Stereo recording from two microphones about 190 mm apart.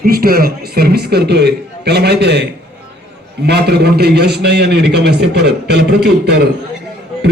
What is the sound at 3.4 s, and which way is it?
A man's voice, 60° right (ahead or behind).